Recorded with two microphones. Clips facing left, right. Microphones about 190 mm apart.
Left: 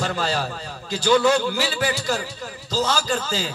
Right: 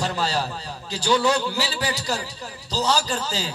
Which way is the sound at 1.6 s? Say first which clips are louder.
Left 3 dB; 35° right (ahead or behind).